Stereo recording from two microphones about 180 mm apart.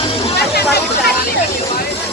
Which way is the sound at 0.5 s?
65° left (ahead or behind).